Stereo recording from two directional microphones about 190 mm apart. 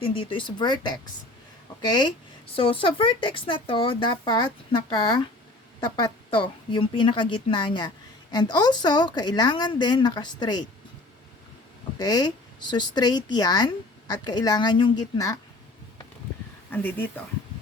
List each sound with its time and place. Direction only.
0.0 s a woman's voice: 25° left (ahead or behind)
11.9 s a woman's voice: 20° left (ahead or behind)
16.7 s speech: 10° left (ahead or behind)